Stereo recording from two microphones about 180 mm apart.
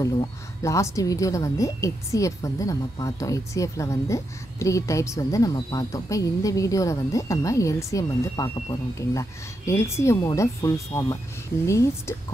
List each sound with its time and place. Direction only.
0.6 s a woman's voice: 15° left (ahead or behind)